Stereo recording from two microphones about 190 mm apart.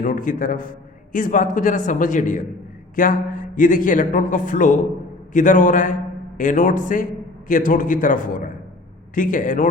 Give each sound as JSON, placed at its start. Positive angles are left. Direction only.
{"t": 0.0, "sound": "a man's voice", "side_deg": 45}